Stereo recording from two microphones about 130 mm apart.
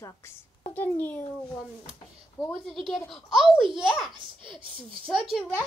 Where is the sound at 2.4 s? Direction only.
5° left (ahead or behind).